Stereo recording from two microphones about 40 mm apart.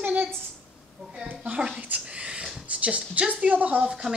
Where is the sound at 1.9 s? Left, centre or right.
Right.